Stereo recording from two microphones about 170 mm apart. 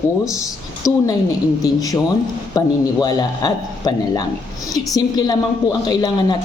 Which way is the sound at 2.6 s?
25° left (ahead or behind).